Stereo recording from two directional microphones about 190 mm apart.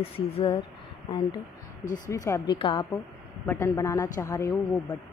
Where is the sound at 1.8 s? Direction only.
45° left (ahead or behind).